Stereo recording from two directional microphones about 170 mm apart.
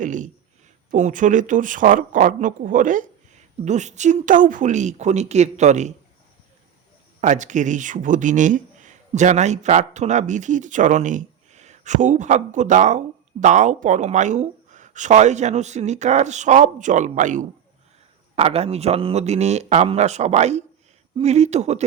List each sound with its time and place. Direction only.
0.0 s a sound: 45° right (ahead or behind)
0.9 s speech: 50° right (ahead or behind)
7.2 s speech: 45° right (ahead or behind)
18.3 s speech: 35° right (ahead or behind)